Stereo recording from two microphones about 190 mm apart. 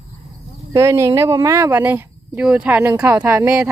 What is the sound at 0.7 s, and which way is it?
Speech, 15° right (ahead or behind).